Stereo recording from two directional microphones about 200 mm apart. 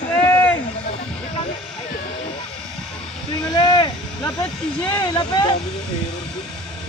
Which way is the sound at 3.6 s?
20° left (ahead or behind).